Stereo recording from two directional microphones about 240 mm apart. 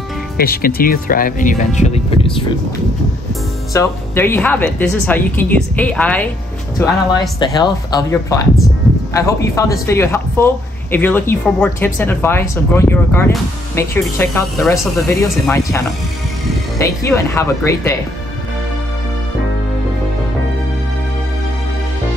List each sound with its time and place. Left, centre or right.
0.4 s speech: left
3.7 s a woman's voice: centre
6.8 s a woman's voice: centre